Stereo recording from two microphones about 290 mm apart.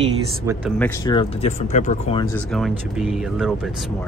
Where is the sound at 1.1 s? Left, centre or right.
Left.